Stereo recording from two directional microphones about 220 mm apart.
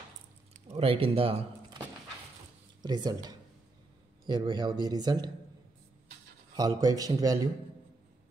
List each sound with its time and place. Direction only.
0.7 s speech: 25° right (ahead or behind)
2.8 s speech: 20° right (ahead or behind)
6.5 s speech: 15° right (ahead or behind)